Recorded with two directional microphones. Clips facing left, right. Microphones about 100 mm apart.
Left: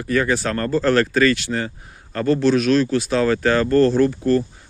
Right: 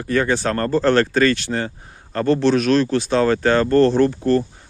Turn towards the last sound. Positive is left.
turn(degrees=-35)  # may be behind; listen again after turning